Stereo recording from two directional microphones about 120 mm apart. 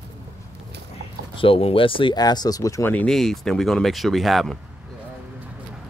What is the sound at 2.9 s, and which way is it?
Speech, 10° left (ahead or behind).